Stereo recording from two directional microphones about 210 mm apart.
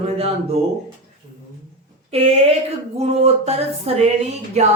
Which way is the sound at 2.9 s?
30° right (ahead or behind).